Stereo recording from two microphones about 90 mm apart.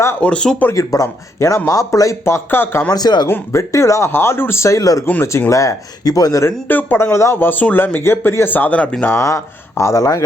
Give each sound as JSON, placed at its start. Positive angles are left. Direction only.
{"t": 0.2, "sound": "speech", "side_deg": 10}
{"t": 0.7, "sound": "speech", "side_deg": 35}
{"t": 2.9, "sound": "speech", "side_deg": 50}
{"t": 3.2, "sound": "speech", "side_deg": 30}
{"t": 6.4, "sound": "speech", "side_deg": 25}
{"t": 9.0, "sound": "speech", "side_deg": 35}